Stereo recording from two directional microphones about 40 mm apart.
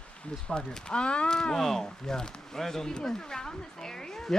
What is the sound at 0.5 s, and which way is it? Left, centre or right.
Speech, centre.